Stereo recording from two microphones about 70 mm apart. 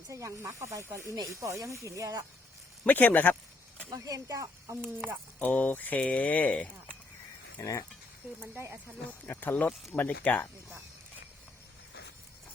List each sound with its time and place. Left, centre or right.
0.1 s speech: right
2.8 s mantra: left
3.8 s speech: right
5.4 s mantra: left
7.6 s speech: left
8.4 s speech: right
9.0 s mantra: left